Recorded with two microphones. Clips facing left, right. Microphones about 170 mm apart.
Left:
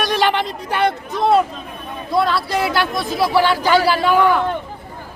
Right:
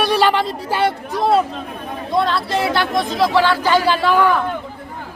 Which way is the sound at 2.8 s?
5° left (ahead or behind).